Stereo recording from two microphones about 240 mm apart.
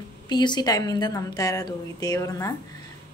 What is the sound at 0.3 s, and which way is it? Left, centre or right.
A woman's voice, centre.